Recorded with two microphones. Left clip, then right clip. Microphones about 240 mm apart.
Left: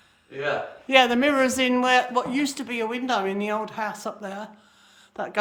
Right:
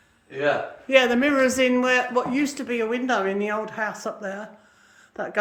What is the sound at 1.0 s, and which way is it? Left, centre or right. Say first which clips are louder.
Speech: right 1 dB; centre.